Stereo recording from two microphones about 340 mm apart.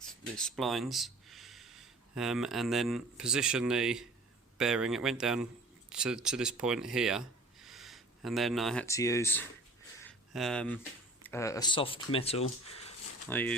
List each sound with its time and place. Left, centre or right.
0.1 s speech: centre
13.3 s speech: centre